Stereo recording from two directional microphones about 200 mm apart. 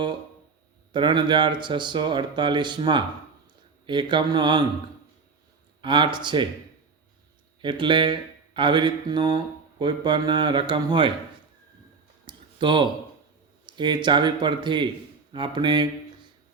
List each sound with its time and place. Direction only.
0.9 s mantra: 25° right (ahead or behind)
5.8 s mantra: 25° right (ahead or behind)
7.6 s mantra: 25° right (ahead or behind)
12.2 s a sound: 25° right (ahead or behind)
13.7 s mantra: 20° right (ahead or behind)